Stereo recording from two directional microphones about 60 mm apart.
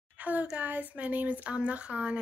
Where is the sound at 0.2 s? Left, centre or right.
Right.